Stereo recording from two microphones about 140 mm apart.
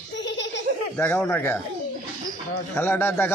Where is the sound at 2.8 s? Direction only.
15° left (ahead or behind).